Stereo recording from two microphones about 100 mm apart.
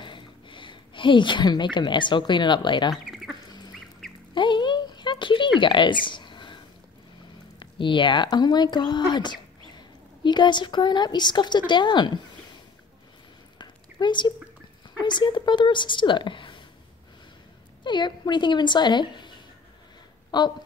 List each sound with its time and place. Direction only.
0.0 s a woman's voice: 55° left (ahead or behind)
2.9 s duck: centre (ahead or behind)
3.4 s duck: 45° left (ahead or behind)
4.3 s a sound: 50° left (ahead or behind)
7.5 s speech: 55° left (ahead or behind)
13.6 s a sound: 50° left (ahead or behind)
15.0 s a woman's voice: 50° left (ahead or behind)
17.8 s a woman's voice: 50° left (ahead or behind)